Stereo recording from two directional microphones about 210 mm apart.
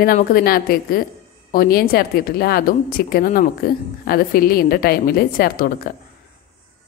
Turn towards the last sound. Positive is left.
turn(degrees=45)  # may be behind; listen again after turning